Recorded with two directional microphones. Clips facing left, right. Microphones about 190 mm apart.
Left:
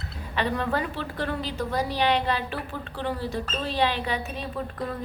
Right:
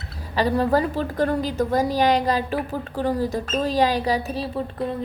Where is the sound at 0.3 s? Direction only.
35° right (ahead or behind).